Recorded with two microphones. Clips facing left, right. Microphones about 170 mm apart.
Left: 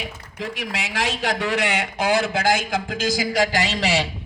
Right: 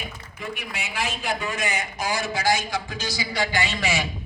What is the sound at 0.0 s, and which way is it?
Speech, 90° left.